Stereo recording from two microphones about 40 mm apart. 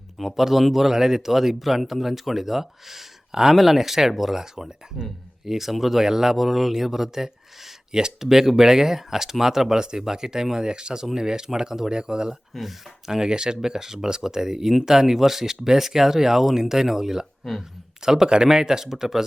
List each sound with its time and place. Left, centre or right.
0.2 s speech: centre
4.9 s speech: centre
5.5 s speech: centre